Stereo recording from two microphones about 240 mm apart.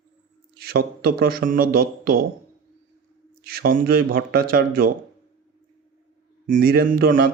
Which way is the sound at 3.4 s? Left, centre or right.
Right.